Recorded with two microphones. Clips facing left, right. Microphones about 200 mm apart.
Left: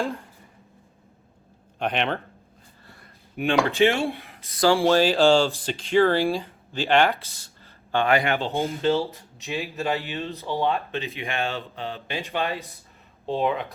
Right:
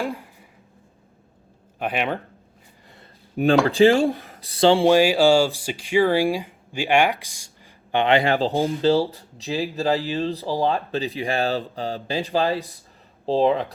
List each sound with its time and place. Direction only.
0.0 s a sound: 15° right (ahead or behind)
1.8 s speech: 5° right (ahead or behind)
3.4 s speech: 40° right (ahead or behind)